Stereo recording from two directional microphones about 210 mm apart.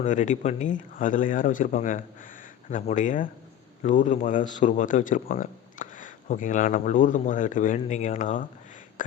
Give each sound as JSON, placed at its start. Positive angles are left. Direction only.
{"t": 0.0, "sound": "speech", "side_deg": 35}